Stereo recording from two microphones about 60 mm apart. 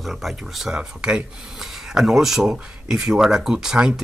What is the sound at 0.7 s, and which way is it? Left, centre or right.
Speech, centre.